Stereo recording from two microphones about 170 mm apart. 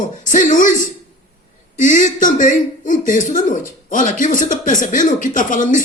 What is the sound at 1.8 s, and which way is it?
Speech, 50° left (ahead or behind).